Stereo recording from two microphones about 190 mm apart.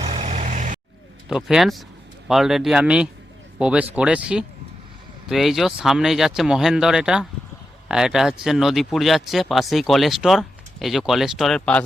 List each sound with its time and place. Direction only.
0.0 s vehicle: 30° right (ahead or behind)
1.3 s speech: 5° right (ahead or behind)